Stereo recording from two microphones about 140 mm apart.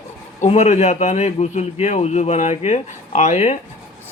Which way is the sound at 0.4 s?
50° left (ahead or behind).